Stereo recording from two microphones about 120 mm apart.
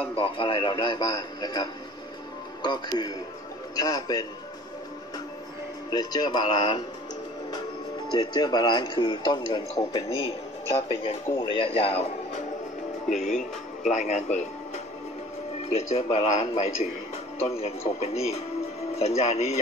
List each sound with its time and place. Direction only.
0.1 s a man's voice: 45° left (ahead or behind); by 4.3 s 30° left (ahead or behind)
5.9 s a man's voice: 35° left (ahead or behind)
8.1 s a man's voice: 40° left (ahead or behind)
11.3 s speech: 50° left (ahead or behind)
13.1 s speech: 90° left
15.7 s speech: 55° left (ahead or behind)